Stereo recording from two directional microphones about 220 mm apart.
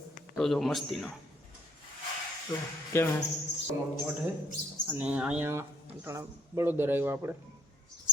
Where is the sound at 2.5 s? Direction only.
20° left (ahead or behind).